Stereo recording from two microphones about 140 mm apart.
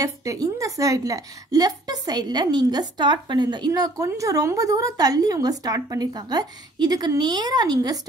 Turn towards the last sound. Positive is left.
turn(degrees=-30)  # may be behind; listen again after turning